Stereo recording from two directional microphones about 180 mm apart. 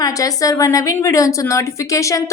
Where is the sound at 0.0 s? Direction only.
20° left (ahead or behind).